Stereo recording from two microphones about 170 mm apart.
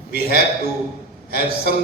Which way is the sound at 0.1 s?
70° left (ahead or behind).